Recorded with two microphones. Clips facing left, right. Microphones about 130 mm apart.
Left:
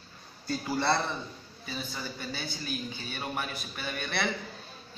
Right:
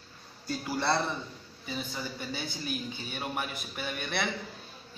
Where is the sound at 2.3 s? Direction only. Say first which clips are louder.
Right 2 dB; 15° right (ahead or behind).